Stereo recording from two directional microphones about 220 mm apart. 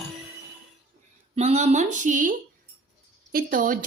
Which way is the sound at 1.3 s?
30° right (ahead or behind).